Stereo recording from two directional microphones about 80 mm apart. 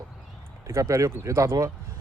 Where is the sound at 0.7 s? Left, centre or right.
Right.